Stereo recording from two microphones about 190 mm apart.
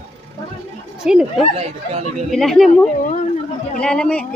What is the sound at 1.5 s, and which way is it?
Speech, 35° right (ahead or behind).